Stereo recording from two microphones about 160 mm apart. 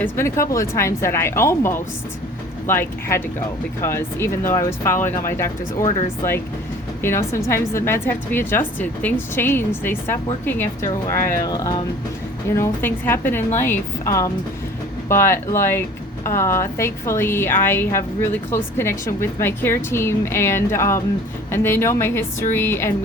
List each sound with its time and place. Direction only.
0.0 s a woman's voice: 15° left (ahead or behind)
7.0 s a woman's voice: 15° left (ahead or behind)
12.5 s a woman's voice: 15° left (ahead or behind)